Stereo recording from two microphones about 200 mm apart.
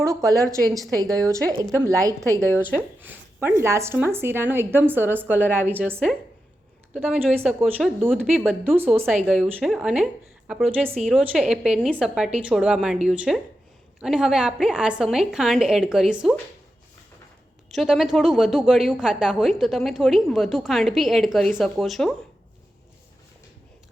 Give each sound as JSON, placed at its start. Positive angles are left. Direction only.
{"t": 0.0, "sound": "a woman's voice", "side_deg": -15}
{"t": 3.0, "sound": "a sound", "side_deg": -10}
{"t": 3.6, "sound": "a woman's voice", "side_deg": -15}
{"t": 8.6, "sound": "a woman's voice", "side_deg": -10}
{"t": 9.0, "sound": "a woman's voice", "side_deg": 0}
{"t": 17.7, "sound": "a woman's voice", "side_deg": 0}